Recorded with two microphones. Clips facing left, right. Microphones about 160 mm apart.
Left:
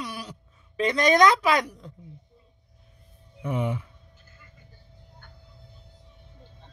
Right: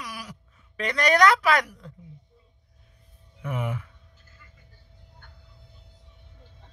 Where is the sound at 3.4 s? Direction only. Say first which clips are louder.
Left 3 dB; 25° left (ahead or behind).